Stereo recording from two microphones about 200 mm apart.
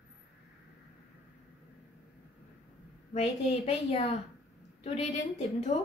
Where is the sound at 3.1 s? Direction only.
30° left (ahead or behind).